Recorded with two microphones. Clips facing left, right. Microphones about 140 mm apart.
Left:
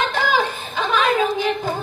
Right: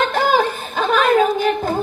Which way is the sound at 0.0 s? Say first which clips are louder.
Right 4 dB; 50° right (ahead or behind).